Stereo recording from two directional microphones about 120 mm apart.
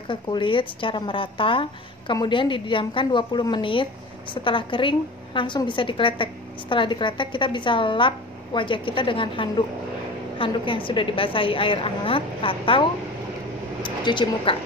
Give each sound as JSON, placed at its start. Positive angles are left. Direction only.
{"t": 0.1, "sound": "a woman's voice", "side_deg": 45}
{"t": 13.8, "sound": "speech", "side_deg": 40}